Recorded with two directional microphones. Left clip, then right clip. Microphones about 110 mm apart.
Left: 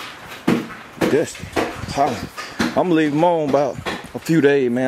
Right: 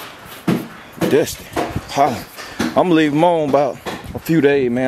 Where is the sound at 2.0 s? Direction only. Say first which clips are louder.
Right 3 dB; 20° right (ahead or behind).